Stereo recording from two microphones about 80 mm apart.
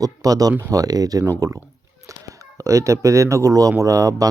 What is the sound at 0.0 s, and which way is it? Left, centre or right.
Speech, right.